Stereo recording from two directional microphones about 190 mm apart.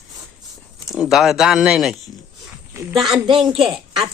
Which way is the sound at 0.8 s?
Centre (ahead or behind).